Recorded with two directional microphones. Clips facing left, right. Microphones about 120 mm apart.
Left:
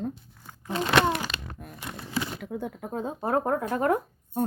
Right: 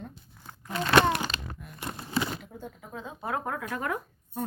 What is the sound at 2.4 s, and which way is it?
Speech, 60° left (ahead or behind).